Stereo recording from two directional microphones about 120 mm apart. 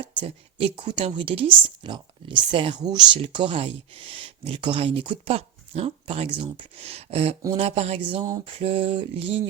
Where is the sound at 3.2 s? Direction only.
45° right (ahead or behind).